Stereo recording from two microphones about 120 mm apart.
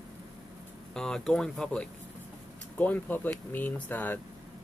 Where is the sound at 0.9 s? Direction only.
5° left (ahead or behind).